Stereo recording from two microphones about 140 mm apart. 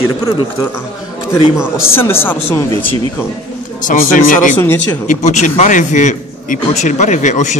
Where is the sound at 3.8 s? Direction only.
85° left.